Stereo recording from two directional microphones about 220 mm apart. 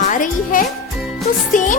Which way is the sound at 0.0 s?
35° left (ahead or behind).